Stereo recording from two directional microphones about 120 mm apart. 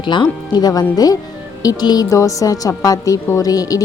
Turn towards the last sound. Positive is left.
turn(degrees=30)  # may be behind; listen again after turning